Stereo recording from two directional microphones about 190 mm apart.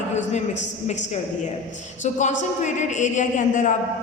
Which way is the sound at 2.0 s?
40° left (ahead or behind).